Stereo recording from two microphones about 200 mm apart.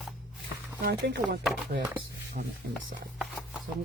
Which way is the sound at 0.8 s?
60° right (ahead or behind).